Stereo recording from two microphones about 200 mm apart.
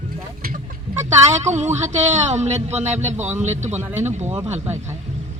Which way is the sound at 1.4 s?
35° right (ahead or behind).